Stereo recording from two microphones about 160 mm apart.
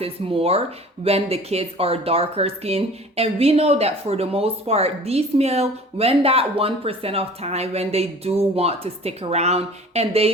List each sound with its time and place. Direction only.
0.0 s speech: 35° right (ahead or behind)